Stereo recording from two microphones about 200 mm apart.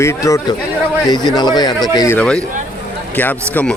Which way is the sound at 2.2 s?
5° left (ahead or behind).